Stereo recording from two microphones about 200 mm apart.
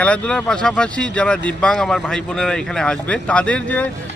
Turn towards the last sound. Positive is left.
turn(degrees=5)  # may be behind; listen again after turning